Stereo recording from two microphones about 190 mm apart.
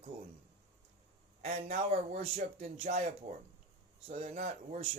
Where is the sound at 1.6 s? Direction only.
45° right (ahead or behind).